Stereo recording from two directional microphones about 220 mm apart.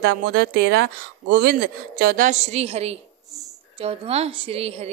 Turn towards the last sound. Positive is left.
turn(degrees=-25)  # may be behind; listen again after turning